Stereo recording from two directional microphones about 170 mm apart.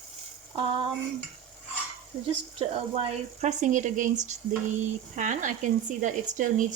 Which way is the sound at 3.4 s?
45° right (ahead or behind).